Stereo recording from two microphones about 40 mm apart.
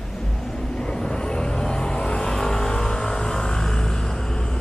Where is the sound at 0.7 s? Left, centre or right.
Centre.